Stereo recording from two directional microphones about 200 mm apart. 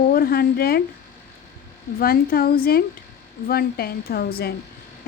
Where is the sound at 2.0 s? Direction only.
50° left (ahead or behind).